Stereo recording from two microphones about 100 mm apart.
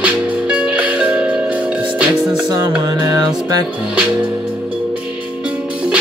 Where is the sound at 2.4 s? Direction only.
45° right (ahead or behind).